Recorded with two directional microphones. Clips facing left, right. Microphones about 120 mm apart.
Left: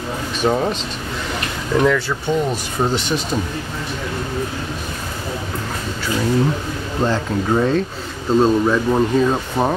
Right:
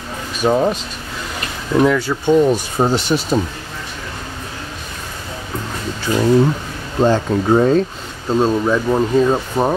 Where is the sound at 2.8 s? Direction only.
40° right (ahead or behind).